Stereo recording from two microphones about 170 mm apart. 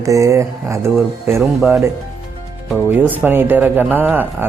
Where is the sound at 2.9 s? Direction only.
10° right (ahead or behind).